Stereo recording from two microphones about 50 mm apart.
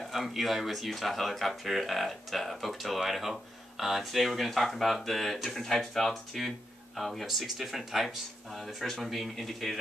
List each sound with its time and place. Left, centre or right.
0.0 s speech: centre